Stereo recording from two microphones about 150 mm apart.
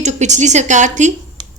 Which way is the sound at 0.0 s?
50° right (ahead or behind).